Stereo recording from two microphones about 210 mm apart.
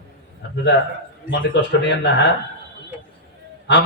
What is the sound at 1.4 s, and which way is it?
Speech, 55° left (ahead or behind).